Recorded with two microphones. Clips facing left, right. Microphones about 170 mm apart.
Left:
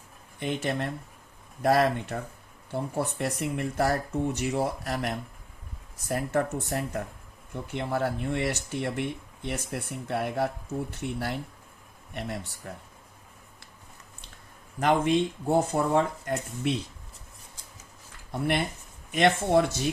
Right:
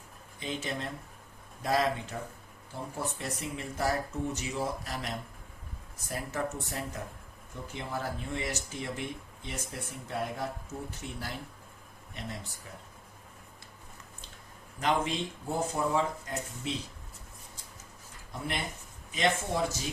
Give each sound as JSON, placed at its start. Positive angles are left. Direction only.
{"t": 0.3, "sound": "speech", "side_deg": 60}
{"t": 14.8, "sound": "speech", "side_deg": 55}
{"t": 18.3, "sound": "speech", "side_deg": 65}